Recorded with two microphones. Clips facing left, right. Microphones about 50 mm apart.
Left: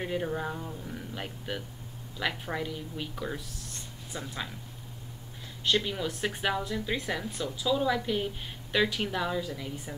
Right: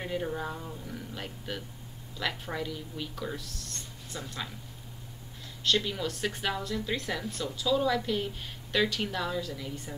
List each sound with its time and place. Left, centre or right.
0.0 s speech: centre
5.6 s speech: centre